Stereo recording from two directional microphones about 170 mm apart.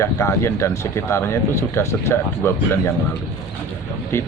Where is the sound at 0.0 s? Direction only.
15° left (ahead or behind).